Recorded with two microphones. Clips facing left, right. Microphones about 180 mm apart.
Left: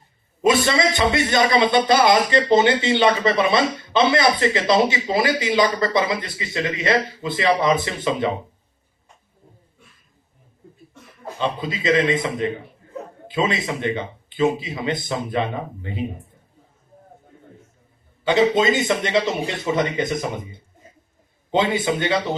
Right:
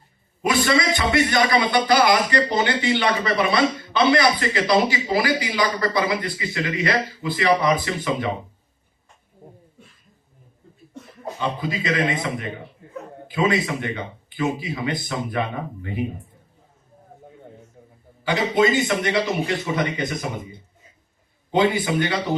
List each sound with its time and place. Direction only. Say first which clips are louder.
0.4 s a man's voice: left 2 dB; 25° left (ahead or behind)
11.3 s a man's voice: left 1 dB; 20° left (ahead or behind)
18.3 s a man's voice: left 2 dB; 25° left (ahead or behind)
21.5 s a man's voice: right 1 dB; 25° left (ahead or behind)